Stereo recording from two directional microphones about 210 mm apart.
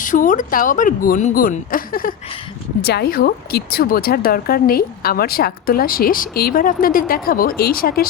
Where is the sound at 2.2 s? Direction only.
25° left (ahead or behind).